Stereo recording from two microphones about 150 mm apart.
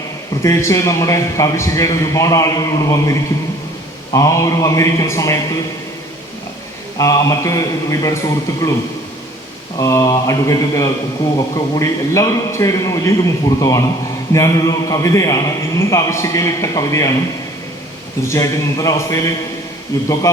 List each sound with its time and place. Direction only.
0.4 s a man's voice: 20° left (ahead or behind)
6.9 s a man's voice: 20° left (ahead or behind)
9.7 s a man's voice: 20° left (ahead or behind)
18.3 s a man's voice: 20° left (ahead or behind)